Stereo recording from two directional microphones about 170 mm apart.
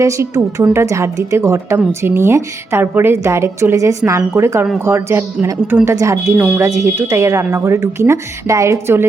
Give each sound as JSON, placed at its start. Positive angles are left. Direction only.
{"t": 0.0, "sound": "a woman's voice", "side_deg": -15}